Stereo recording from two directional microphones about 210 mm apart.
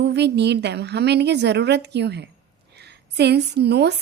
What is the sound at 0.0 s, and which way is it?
A woman's voice, 55° right (ahead or behind).